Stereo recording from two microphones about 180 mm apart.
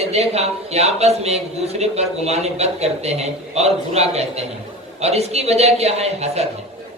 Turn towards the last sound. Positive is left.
turn(degrees=-35)  # may be behind; listen again after turning